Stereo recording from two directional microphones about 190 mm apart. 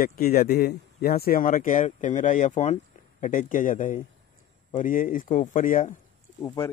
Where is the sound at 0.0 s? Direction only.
50° left (ahead or behind).